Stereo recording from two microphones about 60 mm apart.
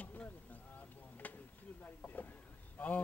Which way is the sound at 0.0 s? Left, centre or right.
Left.